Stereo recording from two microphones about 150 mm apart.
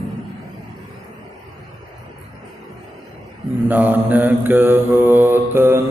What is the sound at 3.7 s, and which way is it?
Mantra, 10° right (ahead or behind).